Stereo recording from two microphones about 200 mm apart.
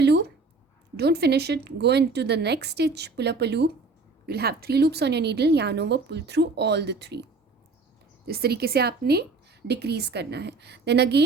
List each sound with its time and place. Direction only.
0.0 s a sound: 55° right (ahead or behind)
0.9 s a woman's voice: 55° right (ahead or behind)
8.3 s a woman's voice: 50° right (ahead or behind)